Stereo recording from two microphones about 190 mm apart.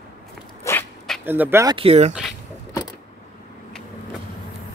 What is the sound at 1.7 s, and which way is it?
Speech, 30° right (ahead or behind).